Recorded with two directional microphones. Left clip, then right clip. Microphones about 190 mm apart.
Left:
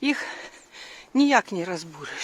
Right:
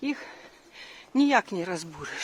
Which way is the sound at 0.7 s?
15° left (ahead or behind).